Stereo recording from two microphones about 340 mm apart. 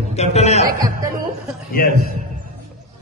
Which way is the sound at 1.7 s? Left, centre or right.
Left.